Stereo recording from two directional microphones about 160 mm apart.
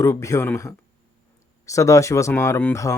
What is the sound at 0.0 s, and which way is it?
Speech, 20° left (ahead or behind).